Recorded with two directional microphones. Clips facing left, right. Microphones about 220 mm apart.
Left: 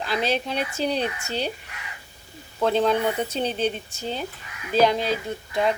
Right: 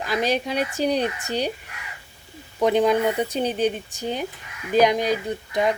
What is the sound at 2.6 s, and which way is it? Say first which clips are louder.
Speech: right 2 dB; 15° right (ahead or behind).